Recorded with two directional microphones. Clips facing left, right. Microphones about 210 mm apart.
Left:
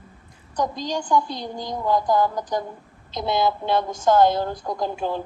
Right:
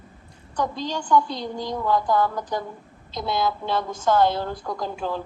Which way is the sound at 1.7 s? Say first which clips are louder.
Left 1 dB; 15° left (ahead or behind).